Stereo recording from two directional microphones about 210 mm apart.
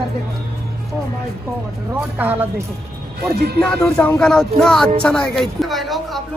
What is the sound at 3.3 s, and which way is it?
Speech, 50° right (ahead or behind).